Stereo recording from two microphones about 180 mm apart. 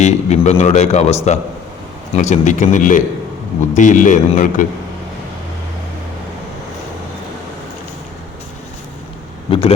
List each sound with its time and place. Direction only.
0.0 s a man's voice: 40° left (ahead or behind)
9.5 s a man's voice: 30° left (ahead or behind)